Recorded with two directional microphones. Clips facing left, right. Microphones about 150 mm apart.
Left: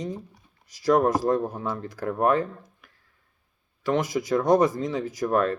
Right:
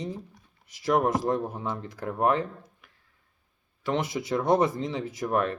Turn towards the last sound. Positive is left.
turn(degrees=-20)  # may be behind; listen again after turning